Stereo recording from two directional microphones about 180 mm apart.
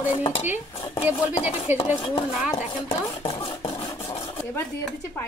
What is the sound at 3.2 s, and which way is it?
Speech, 30° left (ahead or behind).